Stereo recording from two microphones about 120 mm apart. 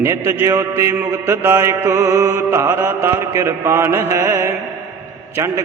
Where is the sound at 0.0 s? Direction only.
20° right (ahead or behind).